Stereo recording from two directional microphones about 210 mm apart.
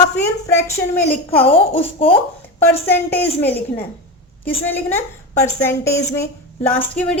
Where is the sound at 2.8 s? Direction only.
10° left (ahead or behind).